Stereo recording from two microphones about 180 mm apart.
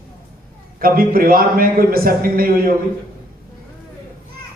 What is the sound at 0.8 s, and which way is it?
Speech, 55° right (ahead or behind).